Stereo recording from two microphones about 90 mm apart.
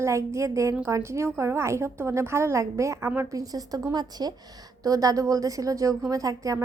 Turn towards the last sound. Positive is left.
turn(degrees=-40)  # may be behind; listen again after turning